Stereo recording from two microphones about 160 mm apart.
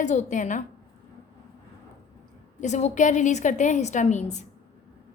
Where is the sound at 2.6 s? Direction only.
45° left (ahead or behind).